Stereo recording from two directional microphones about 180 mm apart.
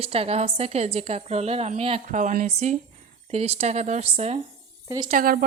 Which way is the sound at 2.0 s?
45° right (ahead or behind).